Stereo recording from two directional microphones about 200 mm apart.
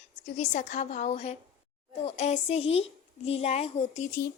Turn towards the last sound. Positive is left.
turn(degrees=35)  # may be behind; listen again after turning